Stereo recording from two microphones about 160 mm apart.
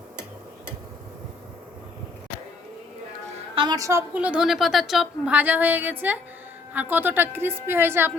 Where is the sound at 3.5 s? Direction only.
30° right (ahead or behind).